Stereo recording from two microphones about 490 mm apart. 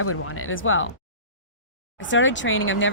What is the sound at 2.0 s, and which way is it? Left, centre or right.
Speech, left.